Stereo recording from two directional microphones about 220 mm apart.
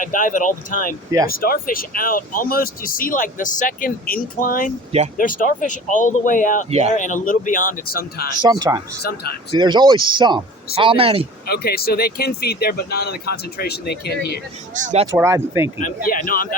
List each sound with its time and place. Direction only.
0.0 s speech: 35° left (ahead or behind)
6.7 s speech: 30° right (ahead or behind)
6.9 s speech: 35° left (ahead or behind)
8.4 s a man's voice: 20° right (ahead or behind)
11.4 s speech: 45° left (ahead or behind)
14.8 s speech: 35° right (ahead or behind)
15.0 s speech: 15° right (ahead or behind)
15.8 s speech: 40° left (ahead or behind)